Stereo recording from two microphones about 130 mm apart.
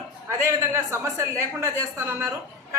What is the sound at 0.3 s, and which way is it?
A woman's voice, 20° right (ahead or behind).